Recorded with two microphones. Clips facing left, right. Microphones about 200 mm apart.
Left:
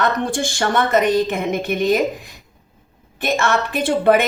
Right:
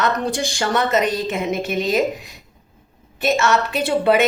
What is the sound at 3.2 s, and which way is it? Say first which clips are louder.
Speech: right 1 dB; 55° left (ahead or behind).